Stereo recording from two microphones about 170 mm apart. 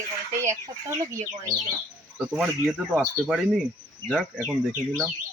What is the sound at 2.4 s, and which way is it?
Speech, 5° right (ahead or behind).